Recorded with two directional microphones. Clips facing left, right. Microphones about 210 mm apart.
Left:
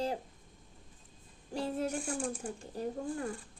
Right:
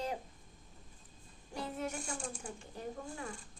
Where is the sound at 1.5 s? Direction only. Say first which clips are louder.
Left 6 dB; 35° left (ahead or behind).